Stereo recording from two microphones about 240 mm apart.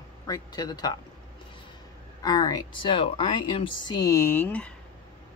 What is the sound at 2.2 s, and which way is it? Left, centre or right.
Speech, centre.